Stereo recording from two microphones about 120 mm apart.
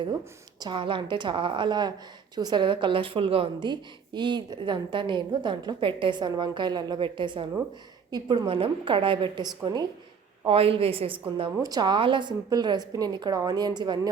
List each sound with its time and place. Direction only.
0.6 s a woman's voice: 40° right (ahead or behind)
8.4 s a woman's voice: 50° right (ahead or behind)
11.6 s a woman's voice: 35° right (ahead or behind)